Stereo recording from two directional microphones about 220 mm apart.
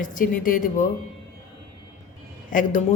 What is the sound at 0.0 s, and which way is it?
Speech, 35° left (ahead or behind).